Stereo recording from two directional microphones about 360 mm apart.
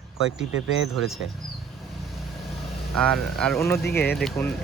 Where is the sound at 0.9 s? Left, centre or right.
Centre.